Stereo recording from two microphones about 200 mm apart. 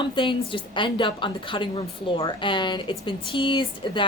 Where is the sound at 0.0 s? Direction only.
25° left (ahead or behind).